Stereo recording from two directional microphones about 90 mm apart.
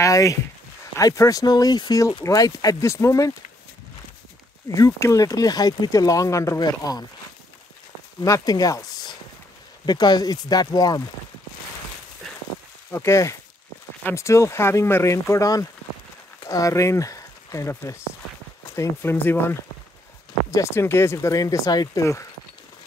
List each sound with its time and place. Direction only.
0.0 s speech: 40° left (ahead or behind)
4.7 s speech: 35° left (ahead or behind)
5.2 s speech: 45° left (ahead or behind)
8.2 s speech: 45° left (ahead or behind)
12.9 s speech: 30° left (ahead or behind)
19.1 s speech: 20° left (ahead or behind)
20.5 s speech: 30° left (ahead or behind)